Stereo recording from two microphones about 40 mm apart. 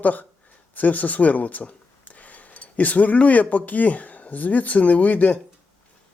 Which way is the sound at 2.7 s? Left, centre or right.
Left.